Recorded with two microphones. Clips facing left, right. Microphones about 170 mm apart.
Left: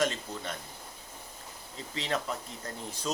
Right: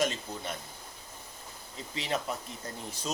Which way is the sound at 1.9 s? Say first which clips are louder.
Even; 15° right (ahead or behind).